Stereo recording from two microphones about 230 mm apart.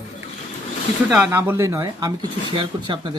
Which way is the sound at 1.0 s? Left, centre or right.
Centre.